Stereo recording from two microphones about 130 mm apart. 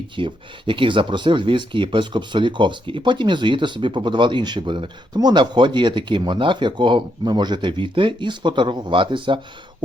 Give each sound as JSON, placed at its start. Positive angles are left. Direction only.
{"t": 0.2, "sound": "speech", "side_deg": -40}